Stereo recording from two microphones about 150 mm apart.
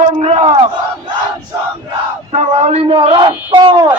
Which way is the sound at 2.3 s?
45° right (ahead or behind).